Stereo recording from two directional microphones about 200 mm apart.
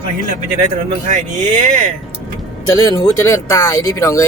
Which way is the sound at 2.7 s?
15° left (ahead or behind).